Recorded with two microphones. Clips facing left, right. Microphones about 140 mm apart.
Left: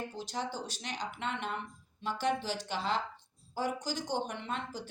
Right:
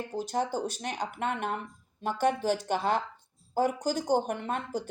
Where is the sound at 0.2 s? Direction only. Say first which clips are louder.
Right 11 dB; 50° right (ahead or behind).